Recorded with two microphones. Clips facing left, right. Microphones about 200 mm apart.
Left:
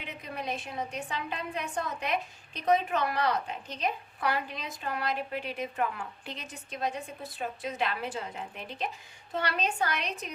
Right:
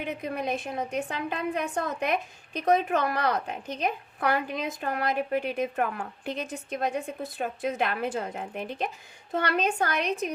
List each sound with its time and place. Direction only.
0.0 s a woman's voice: 50° right (ahead or behind)